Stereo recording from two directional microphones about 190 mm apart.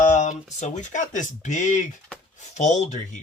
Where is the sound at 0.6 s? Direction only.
40° left (ahead or behind).